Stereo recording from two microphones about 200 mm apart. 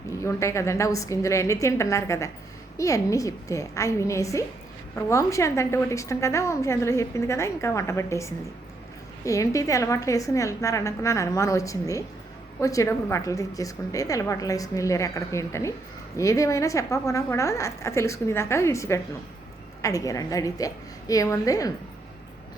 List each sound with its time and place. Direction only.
0.2 s a woman's voice: 15° left (ahead or behind)